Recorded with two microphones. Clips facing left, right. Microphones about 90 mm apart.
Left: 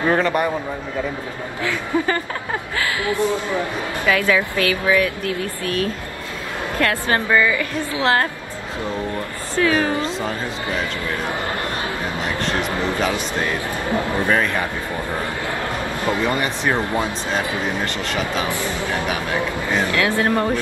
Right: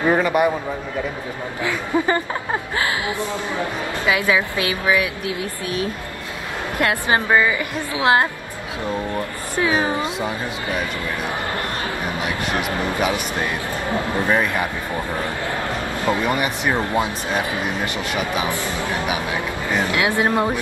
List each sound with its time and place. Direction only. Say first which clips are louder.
0.1 s speech: right 2 dB; 10° right (ahead or behind)
1.6 s speech: even; 20° right (ahead or behind)
4.1 s speech: left 1 dB; 15° right (ahead or behind)
9.6 s speech: left 1 dB; 15° right (ahead or behind)
13.0 s speech: even; 15° right (ahead or behind)
16.1 s speech: right 1 dB; 15° right (ahead or behind)
19.9 s speech: even; 15° right (ahead or behind)